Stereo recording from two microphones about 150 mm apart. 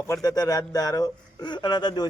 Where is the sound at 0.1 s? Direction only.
25° left (ahead or behind).